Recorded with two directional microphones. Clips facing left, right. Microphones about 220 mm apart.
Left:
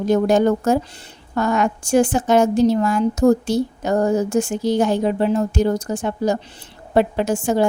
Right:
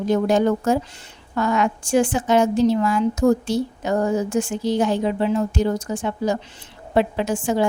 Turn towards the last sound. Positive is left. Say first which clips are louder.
# left 3 dB
turn(degrees=45)  # may be behind; listen again after turning